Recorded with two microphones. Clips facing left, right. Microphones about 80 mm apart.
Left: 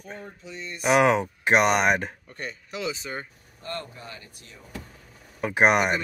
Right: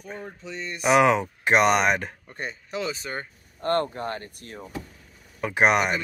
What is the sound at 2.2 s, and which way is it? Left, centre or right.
Speech, right.